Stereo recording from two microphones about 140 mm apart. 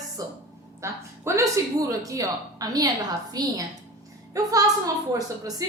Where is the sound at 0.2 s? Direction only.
25° right (ahead or behind).